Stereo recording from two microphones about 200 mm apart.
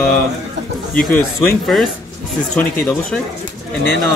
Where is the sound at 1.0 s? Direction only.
45° left (ahead or behind).